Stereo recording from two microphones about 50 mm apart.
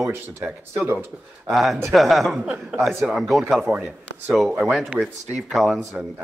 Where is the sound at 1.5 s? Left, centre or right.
Centre.